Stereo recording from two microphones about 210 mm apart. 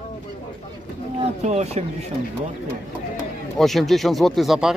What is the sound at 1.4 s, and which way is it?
Speech, 30° right (ahead or behind).